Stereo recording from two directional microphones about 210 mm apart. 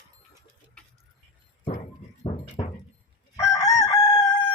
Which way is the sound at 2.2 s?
20° left (ahead or behind).